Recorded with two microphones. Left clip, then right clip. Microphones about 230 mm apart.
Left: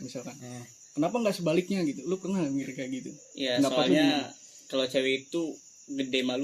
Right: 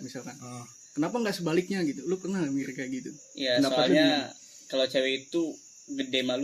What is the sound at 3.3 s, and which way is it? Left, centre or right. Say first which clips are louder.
Speech: right 1 dB; left.